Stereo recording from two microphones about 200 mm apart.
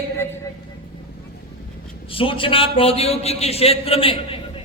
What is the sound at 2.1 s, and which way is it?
A man's voice, 25° left (ahead or behind).